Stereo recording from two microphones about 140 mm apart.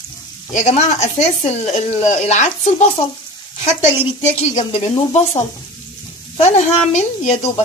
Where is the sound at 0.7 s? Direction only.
55° left (ahead or behind).